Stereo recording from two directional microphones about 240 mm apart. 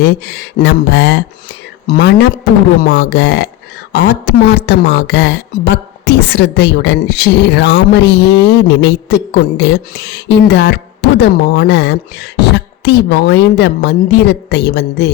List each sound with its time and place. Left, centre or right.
0.0 s speech: left